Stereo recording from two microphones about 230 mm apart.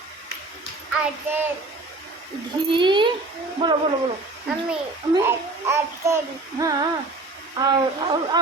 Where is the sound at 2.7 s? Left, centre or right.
Right.